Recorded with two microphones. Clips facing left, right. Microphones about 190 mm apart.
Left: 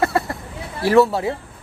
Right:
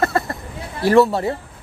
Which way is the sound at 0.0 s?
10° left (ahead or behind).